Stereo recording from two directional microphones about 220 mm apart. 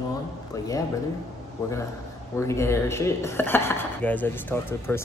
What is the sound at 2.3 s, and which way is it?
Speech, 10° left (ahead or behind).